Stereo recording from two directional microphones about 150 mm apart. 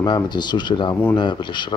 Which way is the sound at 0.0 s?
30° left (ahead or behind).